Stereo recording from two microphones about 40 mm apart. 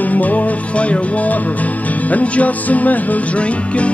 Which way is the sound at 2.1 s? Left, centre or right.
Left.